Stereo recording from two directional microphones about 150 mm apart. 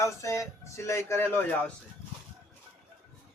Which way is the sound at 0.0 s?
20° left (ahead or behind).